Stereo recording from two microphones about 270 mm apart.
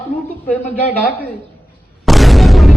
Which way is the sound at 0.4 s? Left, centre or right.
Centre.